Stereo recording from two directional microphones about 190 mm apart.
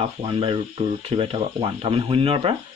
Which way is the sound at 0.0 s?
30° right (ahead or behind).